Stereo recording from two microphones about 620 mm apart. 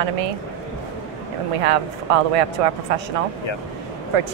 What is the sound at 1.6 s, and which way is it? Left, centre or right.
Speech, right.